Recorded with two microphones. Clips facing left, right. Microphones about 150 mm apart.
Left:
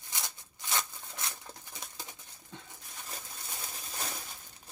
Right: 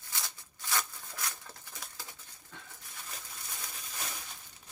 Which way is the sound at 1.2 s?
25° left (ahead or behind).